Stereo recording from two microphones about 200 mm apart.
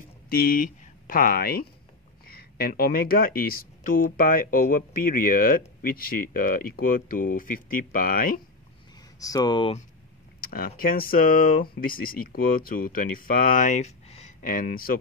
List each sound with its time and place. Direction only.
0.3 s speech: 45° left (ahead or behind)
9.2 s speech: 20° left (ahead or behind)
10.4 s speech: 45° left (ahead or behind)